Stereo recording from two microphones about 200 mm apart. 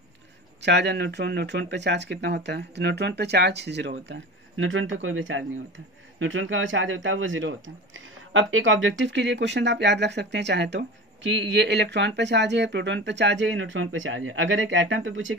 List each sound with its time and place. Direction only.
0.6 s speech: 60° right (ahead or behind)
4.1 s speech: 75° right (ahead or behind)